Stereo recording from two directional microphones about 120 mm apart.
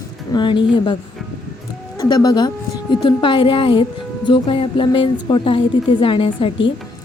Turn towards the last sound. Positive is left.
turn(degrees=45)  # may be behind; listen again after turning